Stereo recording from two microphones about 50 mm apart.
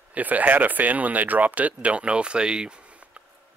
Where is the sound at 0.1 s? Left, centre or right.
Right.